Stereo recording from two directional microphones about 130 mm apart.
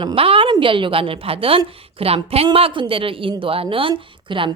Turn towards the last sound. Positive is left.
turn(degrees=-40)  # may be behind; listen again after turning